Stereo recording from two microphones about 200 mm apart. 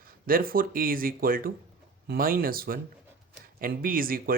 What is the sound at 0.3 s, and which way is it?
Speech, 45° right (ahead or behind).